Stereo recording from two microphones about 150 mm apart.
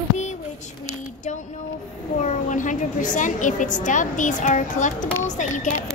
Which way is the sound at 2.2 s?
55° left (ahead or behind).